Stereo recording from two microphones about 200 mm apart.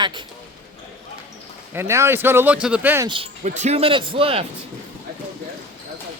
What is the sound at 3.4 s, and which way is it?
Speech, 35° right (ahead or behind).